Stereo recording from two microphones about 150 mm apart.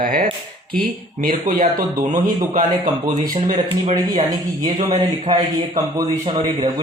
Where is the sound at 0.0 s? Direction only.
75° right (ahead or behind).